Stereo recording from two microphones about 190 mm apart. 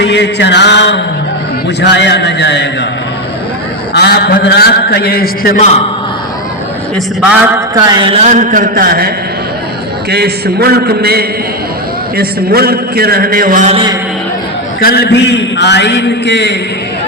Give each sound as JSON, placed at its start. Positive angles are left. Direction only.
{"t": 0.0, "sound": "mantra", "side_deg": 65}
{"t": 1.8, "sound": "a man's voice", "side_deg": 65}
{"t": 3.9, "sound": "a man's voice", "side_deg": 60}
{"t": 5.5, "sound": "a man's voice", "side_deg": 35}
{"t": 6.9, "sound": "a man's voice", "side_deg": -5}
{"t": 7.9, "sound": "a man's voice", "side_deg": -30}
{"t": 14.8, "sound": "a man's voice", "side_deg": 55}